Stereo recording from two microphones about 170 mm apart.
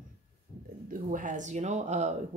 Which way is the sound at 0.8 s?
50° right (ahead or behind).